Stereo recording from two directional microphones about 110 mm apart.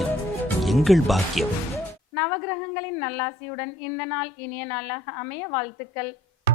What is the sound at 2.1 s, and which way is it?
A woman's voice, 20° left (ahead or behind).